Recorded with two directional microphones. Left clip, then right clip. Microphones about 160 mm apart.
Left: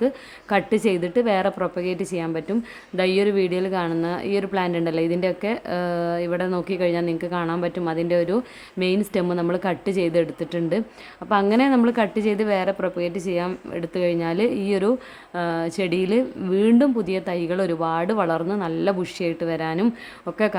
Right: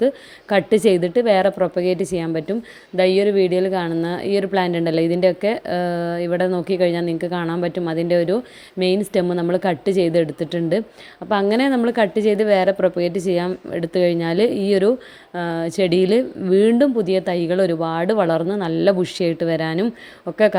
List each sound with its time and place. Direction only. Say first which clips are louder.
0.5 s a woman's voice: right 5 dB; 20° right (ahead or behind)